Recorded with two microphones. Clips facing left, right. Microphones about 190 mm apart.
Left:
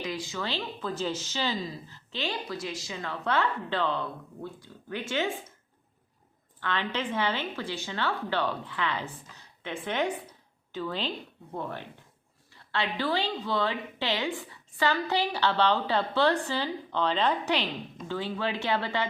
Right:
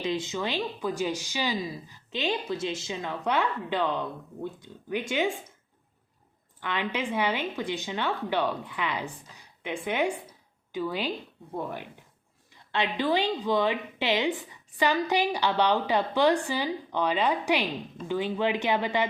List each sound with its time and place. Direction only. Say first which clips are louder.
0.0 s a woman's voice: right 4 dB; 25° right (ahead or behind)
6.6 s a woman's voice: right 1 dB; 15° right (ahead or behind)